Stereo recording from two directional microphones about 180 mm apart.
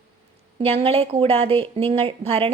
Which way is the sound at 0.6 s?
30° right (ahead or behind).